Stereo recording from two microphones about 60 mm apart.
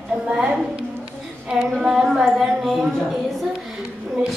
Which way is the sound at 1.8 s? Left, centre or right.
Centre.